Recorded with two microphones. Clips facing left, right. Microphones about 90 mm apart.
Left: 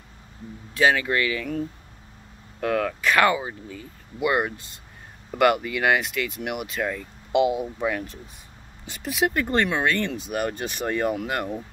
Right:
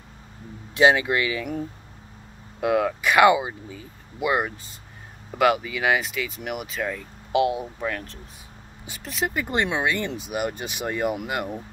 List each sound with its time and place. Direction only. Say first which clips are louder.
0.7 s speech: right 2 dB; 20° right (ahead or behind)
2.6 s speech: right 2 dB; 10° right (ahead or behind)